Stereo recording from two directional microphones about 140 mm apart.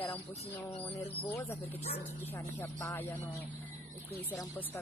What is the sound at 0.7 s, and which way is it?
Speech, 45° left (ahead or behind).